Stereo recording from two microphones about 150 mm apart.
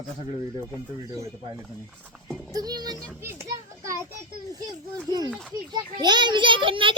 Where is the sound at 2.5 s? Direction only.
25° right (ahead or behind).